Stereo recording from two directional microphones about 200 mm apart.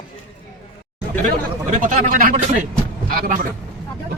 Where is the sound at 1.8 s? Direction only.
40° right (ahead or behind).